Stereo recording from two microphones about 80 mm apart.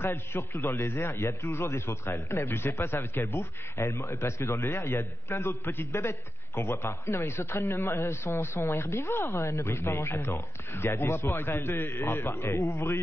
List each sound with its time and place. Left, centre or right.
0.0 s a man's voice: left